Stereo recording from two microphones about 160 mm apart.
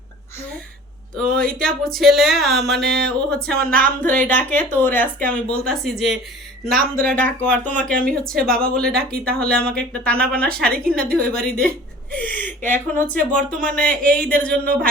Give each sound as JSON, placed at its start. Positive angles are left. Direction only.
{"t": 1.1, "sound": "speech", "side_deg": 5}
{"t": 2.8, "sound": "a sound", "side_deg": -90}
{"t": 3.1, "sound": "speech", "side_deg": 5}
{"t": 6.7, "sound": "speech", "side_deg": -65}
{"t": 7.0, "sound": "speech", "side_deg": 10}